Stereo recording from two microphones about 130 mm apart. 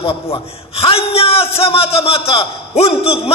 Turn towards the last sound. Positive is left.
turn(degrees=50)  # may be behind; listen again after turning